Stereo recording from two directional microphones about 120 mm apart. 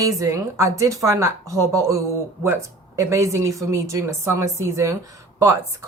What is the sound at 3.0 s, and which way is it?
A woman's voice, 25° right (ahead or behind).